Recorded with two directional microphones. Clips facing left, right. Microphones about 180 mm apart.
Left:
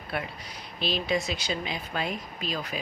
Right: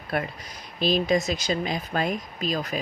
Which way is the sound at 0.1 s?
45° right (ahead or behind).